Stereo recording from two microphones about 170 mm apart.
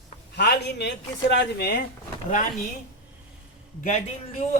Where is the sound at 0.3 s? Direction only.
75° left (ahead or behind).